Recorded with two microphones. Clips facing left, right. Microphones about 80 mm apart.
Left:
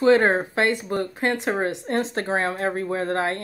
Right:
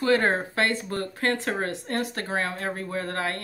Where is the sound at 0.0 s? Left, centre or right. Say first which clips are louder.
Left 5 dB; left.